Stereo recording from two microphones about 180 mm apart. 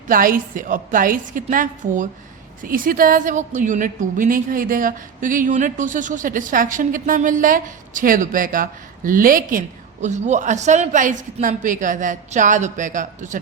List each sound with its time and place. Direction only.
0.1 s a woman's voice: 50° right (ahead or behind)